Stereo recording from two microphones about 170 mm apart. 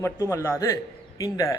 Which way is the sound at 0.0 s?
15° left (ahead or behind).